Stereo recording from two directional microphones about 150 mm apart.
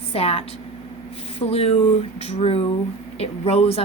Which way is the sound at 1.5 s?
40° left (ahead or behind).